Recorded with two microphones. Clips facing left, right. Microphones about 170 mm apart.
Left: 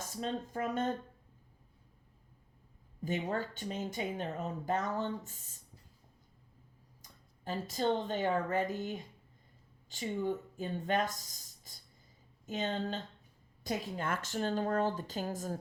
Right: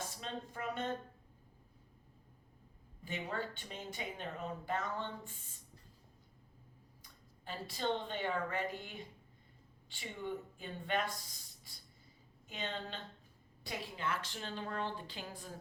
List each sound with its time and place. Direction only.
0.0 s speech: 45° left (ahead or behind)
3.0 s speech: 45° left (ahead or behind)
7.0 s speech: 45° left (ahead or behind)